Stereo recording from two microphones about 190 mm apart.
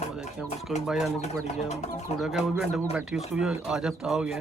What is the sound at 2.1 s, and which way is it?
Speech, centre (ahead or behind).